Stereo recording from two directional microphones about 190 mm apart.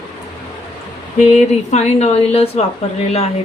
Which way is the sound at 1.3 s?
35° left (ahead or behind).